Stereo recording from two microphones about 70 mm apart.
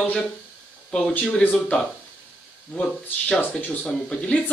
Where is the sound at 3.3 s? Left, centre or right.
Left.